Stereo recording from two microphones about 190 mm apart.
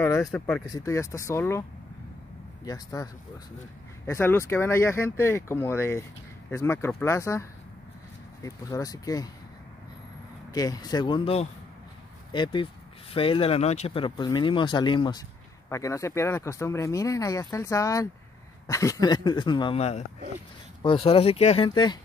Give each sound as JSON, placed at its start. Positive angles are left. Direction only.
{"t": 0.0, "sound": "speech", "side_deg": 15}
{"t": 0.7, "sound": "speech", "side_deg": 15}
{"t": 2.6, "sound": "speech", "side_deg": 20}
{"t": 10.5, "sound": "speech", "side_deg": 20}